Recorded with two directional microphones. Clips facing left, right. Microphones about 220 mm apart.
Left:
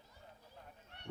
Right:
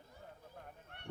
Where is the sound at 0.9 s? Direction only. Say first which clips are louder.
Right 2 dB; 55° right (ahead or behind).